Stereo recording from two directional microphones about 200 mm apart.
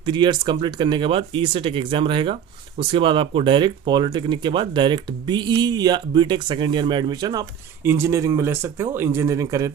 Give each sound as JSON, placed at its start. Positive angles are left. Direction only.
{"t": 0.0, "sound": "speech", "side_deg": -25}